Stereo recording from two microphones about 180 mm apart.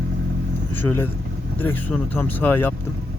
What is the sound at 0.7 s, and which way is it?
Speech, 10° left (ahead or behind).